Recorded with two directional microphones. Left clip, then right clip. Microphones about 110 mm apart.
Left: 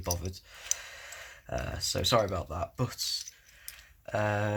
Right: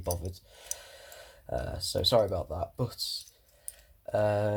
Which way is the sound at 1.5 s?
20° right (ahead or behind).